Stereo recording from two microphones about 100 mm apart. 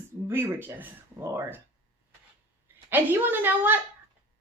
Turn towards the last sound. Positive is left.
turn(degrees=-20)  # may be behind; listen again after turning